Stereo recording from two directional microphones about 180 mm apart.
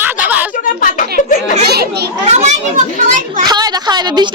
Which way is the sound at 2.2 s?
40° right (ahead or behind).